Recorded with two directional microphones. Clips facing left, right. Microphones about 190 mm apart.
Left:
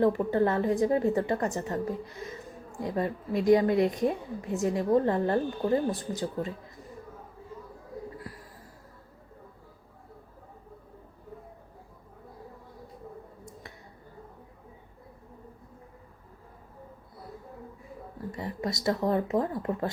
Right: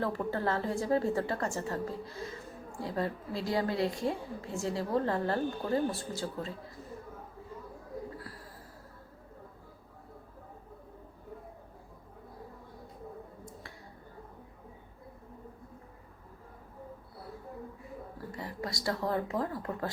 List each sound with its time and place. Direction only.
0.0 s a woman's voice: 20° left (ahead or behind)
18.3 s speech: 20° left (ahead or behind)